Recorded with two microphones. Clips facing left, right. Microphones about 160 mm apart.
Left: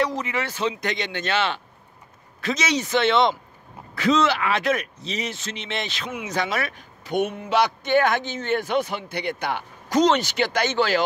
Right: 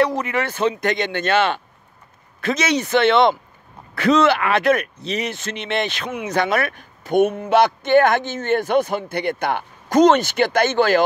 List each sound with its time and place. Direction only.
0.0 s a man's voice: 60° right (ahead or behind)